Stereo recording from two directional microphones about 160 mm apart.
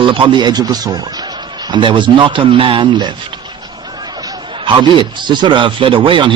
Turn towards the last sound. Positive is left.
turn(degrees=-30)  # may be behind; listen again after turning